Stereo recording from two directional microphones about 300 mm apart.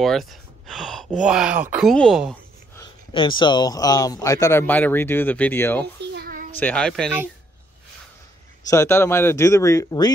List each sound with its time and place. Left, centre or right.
0.0 s speech: centre
2.7 s speech: centre
6.1 s a sound: right
6.6 s speech: centre
8.6 s speech: centre